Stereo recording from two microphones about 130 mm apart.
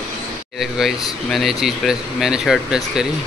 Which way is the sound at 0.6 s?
Centre (ahead or behind).